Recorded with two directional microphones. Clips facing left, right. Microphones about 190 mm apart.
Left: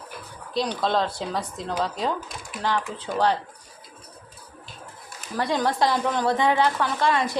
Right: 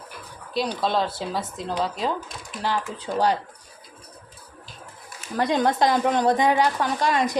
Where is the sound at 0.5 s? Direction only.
5° right (ahead or behind).